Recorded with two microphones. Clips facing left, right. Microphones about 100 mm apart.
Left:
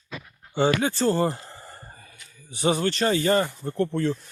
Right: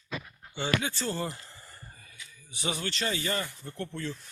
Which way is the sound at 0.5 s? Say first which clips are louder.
Left 9 dB; 45° left (ahead or behind).